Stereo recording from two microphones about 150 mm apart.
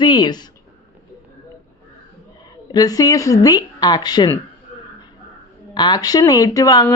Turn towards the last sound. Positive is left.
turn(degrees=25)  # may be behind; listen again after turning